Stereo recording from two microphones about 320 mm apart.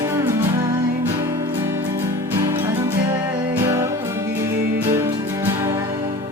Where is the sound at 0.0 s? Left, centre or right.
Centre.